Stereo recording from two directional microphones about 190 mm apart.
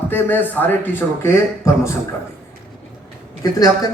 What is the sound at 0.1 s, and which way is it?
A man's voice, 10° left (ahead or behind).